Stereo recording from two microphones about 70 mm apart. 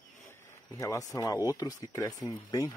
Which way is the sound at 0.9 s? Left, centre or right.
Left.